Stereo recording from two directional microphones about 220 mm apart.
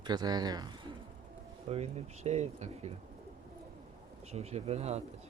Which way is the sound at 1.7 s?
30° right (ahead or behind).